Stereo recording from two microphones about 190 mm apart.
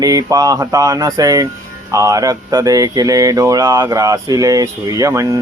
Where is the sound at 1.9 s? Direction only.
15° right (ahead or behind).